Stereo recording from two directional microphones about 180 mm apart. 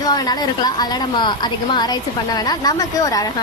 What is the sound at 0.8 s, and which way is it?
A woman's voice, 25° left (ahead or behind).